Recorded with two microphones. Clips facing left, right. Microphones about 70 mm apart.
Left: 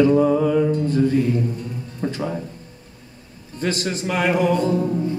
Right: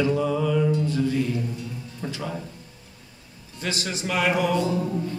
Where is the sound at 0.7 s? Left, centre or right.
Left.